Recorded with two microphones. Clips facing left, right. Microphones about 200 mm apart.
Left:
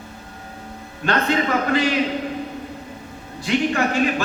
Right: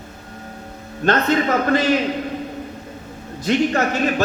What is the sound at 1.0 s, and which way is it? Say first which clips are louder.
Speech: right 3 dB; 40° right (ahead or behind).